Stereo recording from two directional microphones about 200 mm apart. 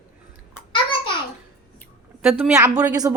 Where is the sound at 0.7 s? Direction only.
25° left (ahead or behind).